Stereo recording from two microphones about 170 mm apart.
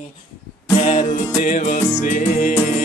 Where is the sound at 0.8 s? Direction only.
40° left (ahead or behind).